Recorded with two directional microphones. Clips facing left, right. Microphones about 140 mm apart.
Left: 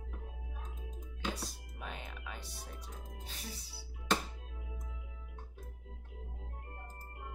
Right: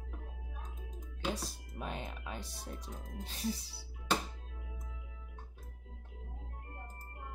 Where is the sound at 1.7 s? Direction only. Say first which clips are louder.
Right 5 dB; 30° right (ahead or behind).